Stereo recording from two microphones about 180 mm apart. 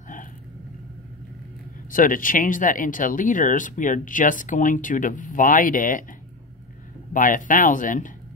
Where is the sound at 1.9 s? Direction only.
50° left (ahead or behind).